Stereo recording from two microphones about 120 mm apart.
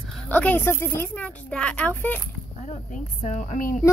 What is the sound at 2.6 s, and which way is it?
A woman's voice, 75° left (ahead or behind).